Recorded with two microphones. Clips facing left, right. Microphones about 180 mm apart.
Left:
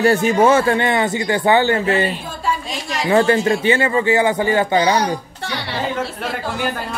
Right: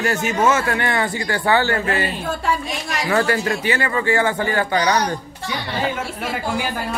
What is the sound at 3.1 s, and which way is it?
A man's voice, 25° left (ahead or behind).